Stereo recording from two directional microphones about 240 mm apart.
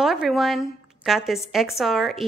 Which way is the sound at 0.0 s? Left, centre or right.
Centre.